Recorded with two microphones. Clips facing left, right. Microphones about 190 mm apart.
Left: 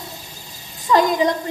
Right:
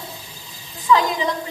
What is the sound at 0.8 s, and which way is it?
Speech, 40° left (ahead or behind).